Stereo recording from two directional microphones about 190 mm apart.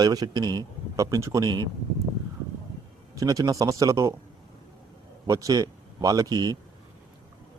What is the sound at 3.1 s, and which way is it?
Speech, 20° right (ahead or behind).